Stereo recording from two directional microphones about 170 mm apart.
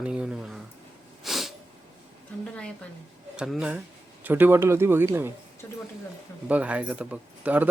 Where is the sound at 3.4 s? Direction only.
5° right (ahead or behind).